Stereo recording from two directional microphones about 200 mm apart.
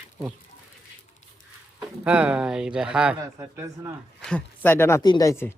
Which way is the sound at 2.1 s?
5° right (ahead or behind).